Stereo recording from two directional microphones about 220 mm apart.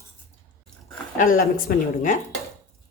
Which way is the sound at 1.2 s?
40° left (ahead or behind).